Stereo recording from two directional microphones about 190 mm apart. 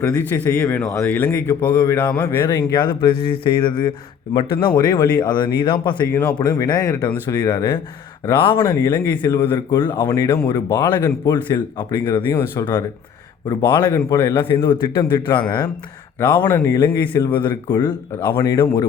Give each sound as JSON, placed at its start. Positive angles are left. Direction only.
{"t": 0.0, "sound": "a man's voice", "side_deg": 10}
{"t": 6.1, "sound": "a man's voice", "side_deg": 15}
{"t": 16.4, "sound": "a man's voice", "side_deg": 15}
{"t": 18.6, "sound": "speech", "side_deg": 25}